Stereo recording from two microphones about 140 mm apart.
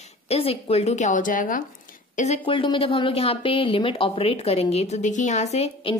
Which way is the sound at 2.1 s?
55° left (ahead or behind).